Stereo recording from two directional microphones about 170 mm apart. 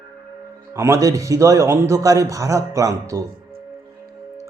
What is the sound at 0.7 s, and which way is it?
A man's voice, 15° right (ahead or behind).